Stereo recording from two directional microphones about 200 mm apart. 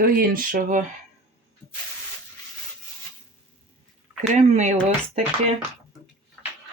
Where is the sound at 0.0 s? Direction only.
45° right (ahead or behind).